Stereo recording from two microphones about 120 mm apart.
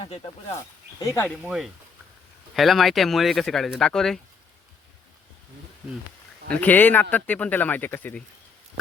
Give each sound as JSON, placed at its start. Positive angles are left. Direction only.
{"t": 0.0, "sound": "speech", "side_deg": 45}
{"t": 0.5, "sound": "speech", "side_deg": 25}
{"t": 1.5, "sound": "speech", "side_deg": -5}
{"t": 6.5, "sound": "speech", "side_deg": 15}